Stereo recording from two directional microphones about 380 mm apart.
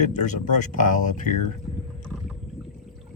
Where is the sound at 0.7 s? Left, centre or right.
Centre.